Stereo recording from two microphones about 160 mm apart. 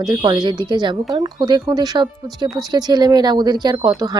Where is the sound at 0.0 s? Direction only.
25° right (ahead or behind).